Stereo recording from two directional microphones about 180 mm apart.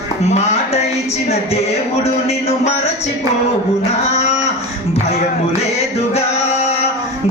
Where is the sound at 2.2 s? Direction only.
35° left (ahead or behind).